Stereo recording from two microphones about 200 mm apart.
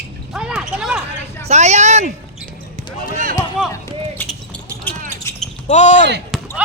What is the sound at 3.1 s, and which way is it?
Run, 40° right (ahead or behind).